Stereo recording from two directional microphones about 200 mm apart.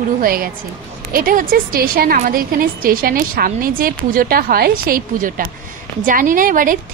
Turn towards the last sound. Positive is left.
turn(degrees=-45)  # may be behind; listen again after turning